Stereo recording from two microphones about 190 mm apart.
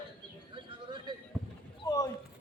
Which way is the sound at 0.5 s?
25° right (ahead or behind).